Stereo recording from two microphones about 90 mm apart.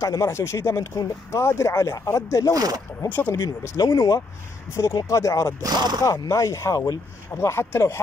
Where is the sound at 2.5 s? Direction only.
45° right (ahead or behind).